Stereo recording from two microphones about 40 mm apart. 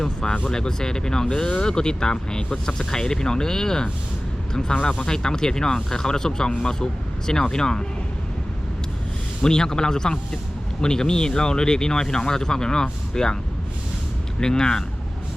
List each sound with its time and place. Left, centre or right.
0.0 s speech: left
9.4 s speech: centre
14.4 s speech: centre